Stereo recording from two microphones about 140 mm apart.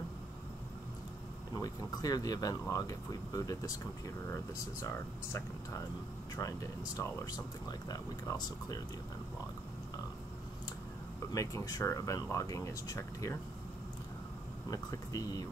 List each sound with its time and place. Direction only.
1.5 s speech: 25° left (ahead or behind)
11.3 s speech: 25° left (ahead or behind)
14.7 s speech: 25° left (ahead or behind)